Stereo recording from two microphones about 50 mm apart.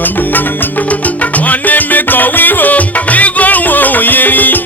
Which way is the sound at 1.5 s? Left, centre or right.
Left.